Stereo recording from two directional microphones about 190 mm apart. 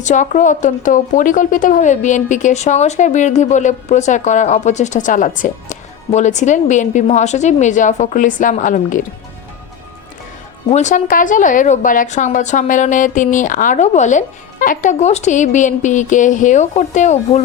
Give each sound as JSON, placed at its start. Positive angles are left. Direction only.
{"t": 0.0, "sound": "speech", "side_deg": 40}
{"t": 10.7, "sound": "speech", "side_deg": 40}